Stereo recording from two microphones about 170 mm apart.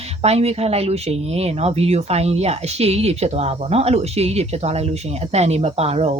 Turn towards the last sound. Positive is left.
turn(degrees=-35)  # may be behind; listen again after turning